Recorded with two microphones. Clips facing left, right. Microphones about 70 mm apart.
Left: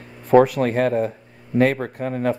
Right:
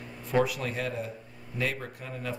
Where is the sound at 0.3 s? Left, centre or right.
Left.